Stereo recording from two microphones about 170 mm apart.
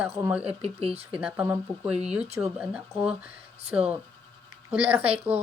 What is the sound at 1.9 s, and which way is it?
Speech, 40° right (ahead or behind).